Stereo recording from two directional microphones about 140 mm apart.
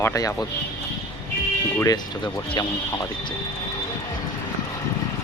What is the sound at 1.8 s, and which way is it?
Speech, 25° left (ahead or behind).